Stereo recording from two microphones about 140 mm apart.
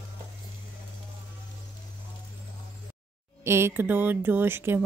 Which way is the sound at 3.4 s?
20° right (ahead or behind).